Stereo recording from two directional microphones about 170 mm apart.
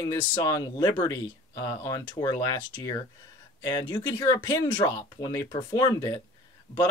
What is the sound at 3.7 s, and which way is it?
Speech, 25° left (ahead or behind).